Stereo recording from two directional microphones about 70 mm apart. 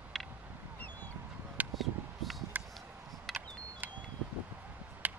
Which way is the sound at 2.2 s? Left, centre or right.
Centre.